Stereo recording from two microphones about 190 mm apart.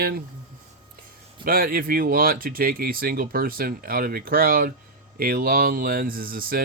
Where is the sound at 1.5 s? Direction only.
50° right (ahead or behind).